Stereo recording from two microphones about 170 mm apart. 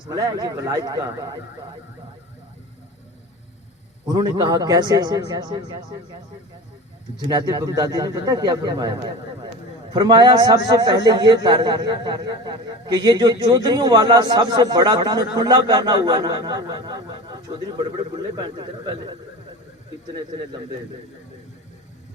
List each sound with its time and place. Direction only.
0.0 s a man's voice: 20° right (ahead or behind)
4.0 s a man's voice: 20° right (ahead or behind)
7.3 s a man's voice: 20° right (ahead or behind)